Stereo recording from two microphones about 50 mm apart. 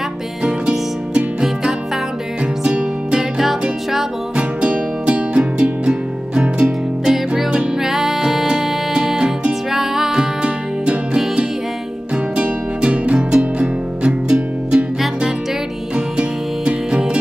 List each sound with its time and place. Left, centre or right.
0.4 s music: centre
4.4 s music: centre
7.1 s music: centre
16.2 s music: centre